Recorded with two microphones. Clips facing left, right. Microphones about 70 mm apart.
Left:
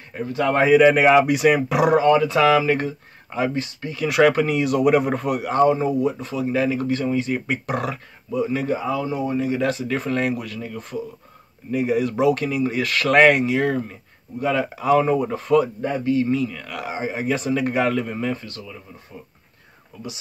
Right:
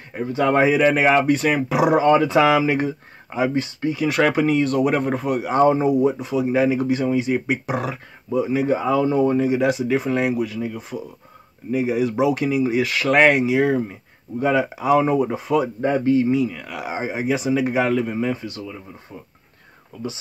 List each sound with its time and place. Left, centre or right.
0.2 s speech: centre
0.9 s speech: centre
1.7 s speech: centre
2.0 s speech: right; by 3.5 s centre
4.1 s speech: centre
5.7 s speech: right; by 8.0 s centre
8.3 s speech: right
8.7 s speech: right
9.5 s speech: centre
15.8 s speech: right
16.3 s speech: centre
17.2 s speech: centre
18.4 s speech: right